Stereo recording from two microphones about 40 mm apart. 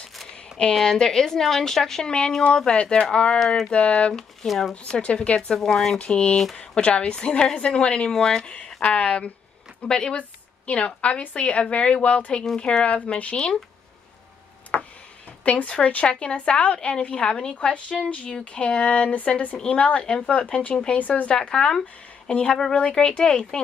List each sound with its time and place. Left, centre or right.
0.7 s a woman's voice: centre
2.0 s a woman's voice: left
2.8 s speech: left
3.3 s a woman's voice: centre
3.7 s a woman's voice: left
5.0 s speech: left
8.1 s a woman's voice: centre
8.8 s speech: left
9.8 s a woman's voice: centre
10.7 s speech: left
14.7 s tick-tock: left
15.4 s a woman's voice: left